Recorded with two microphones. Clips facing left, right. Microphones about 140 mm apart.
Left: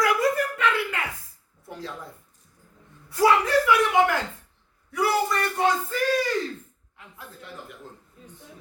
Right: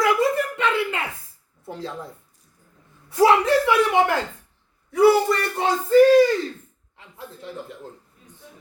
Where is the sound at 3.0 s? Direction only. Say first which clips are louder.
Right 4 dB; 25° right (ahead or behind).